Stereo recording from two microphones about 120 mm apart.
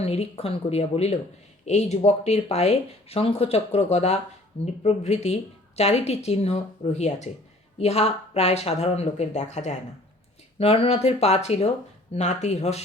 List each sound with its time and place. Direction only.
0.0 s speech: 60° left (ahead or behind)
10.6 s speech: 55° left (ahead or behind)